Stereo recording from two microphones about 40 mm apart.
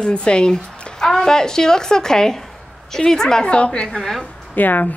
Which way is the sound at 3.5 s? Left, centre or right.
Left.